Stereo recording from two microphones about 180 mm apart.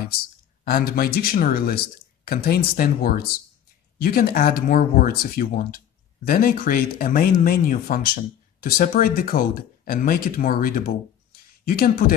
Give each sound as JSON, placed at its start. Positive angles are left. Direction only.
{"t": 0.7, "sound": "speech", "side_deg": 55}